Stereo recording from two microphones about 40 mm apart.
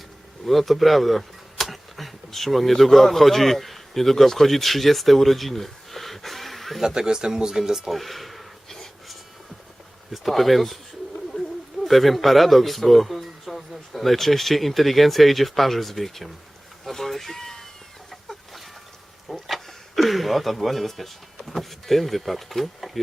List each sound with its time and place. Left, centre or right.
0.4 s speech: centre
6.8 s speech: centre
7.9 s a sound: centre
10.1 s speech: centre
11.3 s a sound: left
11.9 s speech: centre
16.8 s a sound: centre
18.1 s chicken: centre
19.3 s speech: centre